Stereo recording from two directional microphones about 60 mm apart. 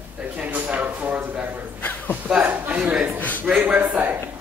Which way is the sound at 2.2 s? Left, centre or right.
Right.